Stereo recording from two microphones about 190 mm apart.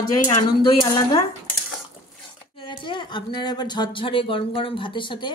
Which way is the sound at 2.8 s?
25° left (ahead or behind).